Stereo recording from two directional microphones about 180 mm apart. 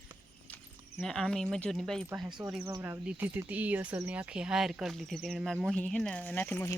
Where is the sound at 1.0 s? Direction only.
5° left (ahead or behind).